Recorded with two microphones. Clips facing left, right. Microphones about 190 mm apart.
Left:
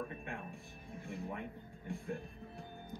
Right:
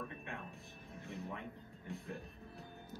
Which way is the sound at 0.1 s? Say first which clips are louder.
Left 3 dB; 50° left (ahead or behind).